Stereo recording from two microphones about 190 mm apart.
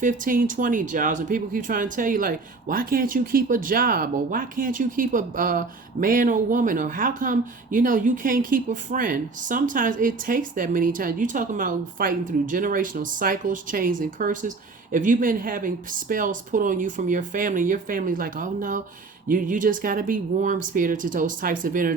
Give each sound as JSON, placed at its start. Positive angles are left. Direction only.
{"t": 0.0, "sound": "speech", "side_deg": -45}